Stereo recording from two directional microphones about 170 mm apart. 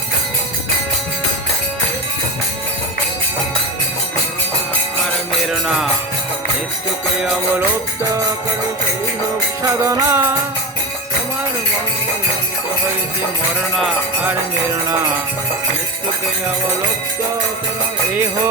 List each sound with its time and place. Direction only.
5.5 s music: centre (ahead or behind)
7.2 s music: 5° right (ahead or behind)
9.6 s music: 15° right (ahead or behind)